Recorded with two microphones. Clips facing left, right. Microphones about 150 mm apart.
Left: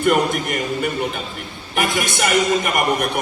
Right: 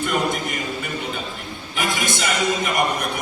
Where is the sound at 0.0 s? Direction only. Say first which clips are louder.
Left 5 dB; 50° left (ahead or behind).